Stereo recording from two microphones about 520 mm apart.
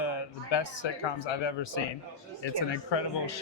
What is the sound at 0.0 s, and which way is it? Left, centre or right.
A man's voice, left.